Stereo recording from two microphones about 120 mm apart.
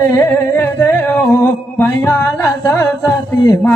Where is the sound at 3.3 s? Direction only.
30° left (ahead or behind).